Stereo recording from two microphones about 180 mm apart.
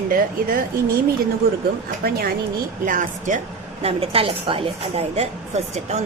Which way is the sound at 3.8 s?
30° right (ahead or behind).